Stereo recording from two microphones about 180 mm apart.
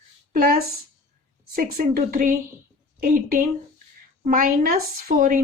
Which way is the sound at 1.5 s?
55° right (ahead or behind).